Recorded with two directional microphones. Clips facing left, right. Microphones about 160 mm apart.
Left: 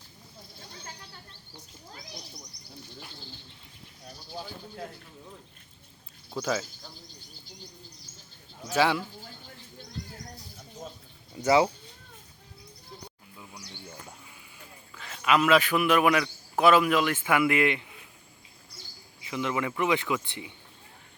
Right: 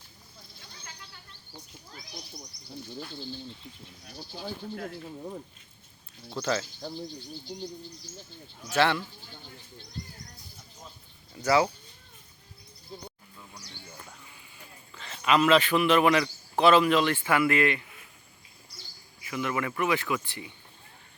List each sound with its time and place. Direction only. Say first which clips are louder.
6.3 s speech: even; 5° left (ahead or behind)
8.7 s speech: even; 10° left (ahead or behind)
11.3 s speech: left 2 dB; 20° left (ahead or behind)
14.9 s a man's voice: even; 5° left (ahead or behind)
19.3 s speech: left 1 dB; 20° left (ahead or behind)